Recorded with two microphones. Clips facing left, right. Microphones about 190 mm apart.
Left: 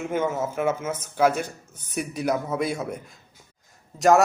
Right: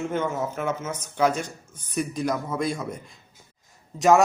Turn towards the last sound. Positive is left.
turn(degrees=0)  # may be behind; listen again after turning